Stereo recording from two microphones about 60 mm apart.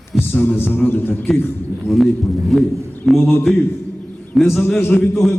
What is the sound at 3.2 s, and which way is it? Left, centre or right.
Speech, left.